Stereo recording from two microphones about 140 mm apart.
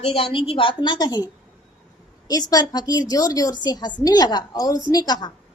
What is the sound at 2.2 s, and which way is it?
A woman's voice, 25° left (ahead or behind).